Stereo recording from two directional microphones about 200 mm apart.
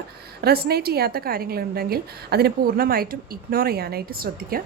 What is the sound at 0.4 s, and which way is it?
A woman's voice, 50° right (ahead or behind).